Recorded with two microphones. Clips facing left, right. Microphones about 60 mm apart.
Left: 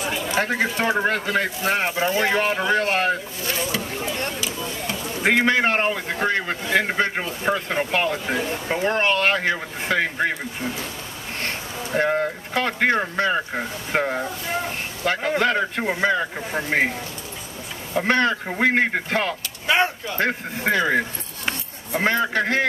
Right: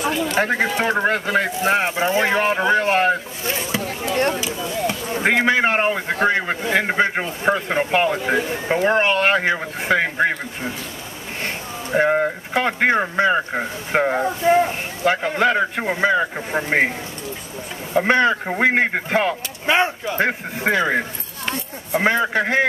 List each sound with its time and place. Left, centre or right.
0.4 s speech: centre
3.4 s speech: right
4.1 s speech: right
4.4 s speech: centre
17.9 s speech: centre